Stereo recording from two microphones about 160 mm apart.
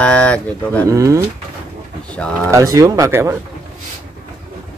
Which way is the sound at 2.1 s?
10° left (ahead or behind).